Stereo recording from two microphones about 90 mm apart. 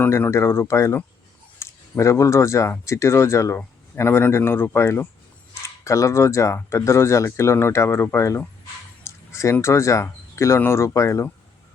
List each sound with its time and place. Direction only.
0.0 s speech: 25° left (ahead or behind)